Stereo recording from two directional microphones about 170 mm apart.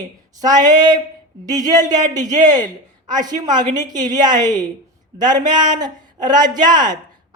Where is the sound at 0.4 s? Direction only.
25° right (ahead or behind).